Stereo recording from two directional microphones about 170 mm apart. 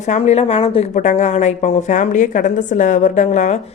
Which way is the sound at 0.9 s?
45° left (ahead or behind).